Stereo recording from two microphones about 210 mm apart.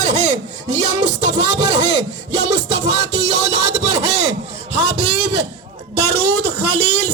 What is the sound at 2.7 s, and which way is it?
Music, 60° right (ahead or behind).